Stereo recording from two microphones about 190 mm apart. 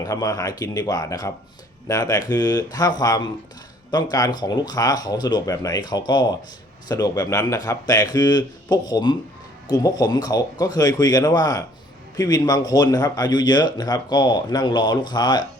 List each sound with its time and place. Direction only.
0.0 s speech: 20° left (ahead or behind)